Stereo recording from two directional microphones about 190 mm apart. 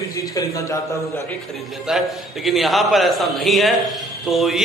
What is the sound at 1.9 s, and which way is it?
A man's voice, centre (ahead or behind).